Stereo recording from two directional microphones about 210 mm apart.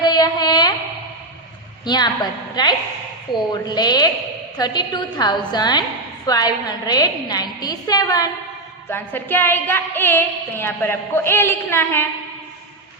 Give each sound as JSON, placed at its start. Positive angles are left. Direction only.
{"t": 0.0, "sound": "a sound", "side_deg": 20}
{"t": 1.8, "sound": "a woman's voice", "side_deg": 20}
{"t": 8.9, "sound": "music", "side_deg": 10}